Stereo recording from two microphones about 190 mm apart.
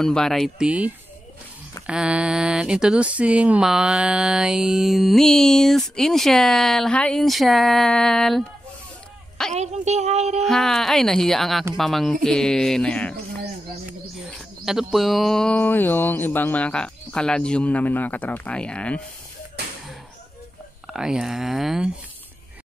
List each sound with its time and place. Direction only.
0.0 s speech: 5° left (ahead or behind)
9.5 s speech: 35° right (ahead or behind)
10.4 s speech: centre (ahead or behind)
14.3 s speech: centre (ahead or behind)
19.6 s a sound: 60° right (ahead or behind)
20.9 s speech: 5° right (ahead or behind)